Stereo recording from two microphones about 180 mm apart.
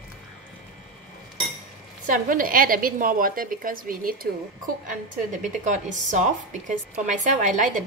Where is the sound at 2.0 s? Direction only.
50° right (ahead or behind).